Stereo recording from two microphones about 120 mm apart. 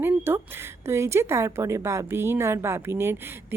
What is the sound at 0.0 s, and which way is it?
A woman's voice, 20° right (ahead or behind).